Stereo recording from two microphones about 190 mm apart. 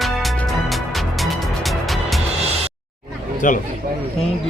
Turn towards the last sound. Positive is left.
turn(degrees=45)  # may be behind; listen again after turning